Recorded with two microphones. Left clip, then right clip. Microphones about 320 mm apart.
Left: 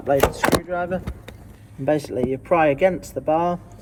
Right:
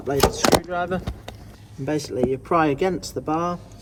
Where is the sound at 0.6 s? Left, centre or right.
Left.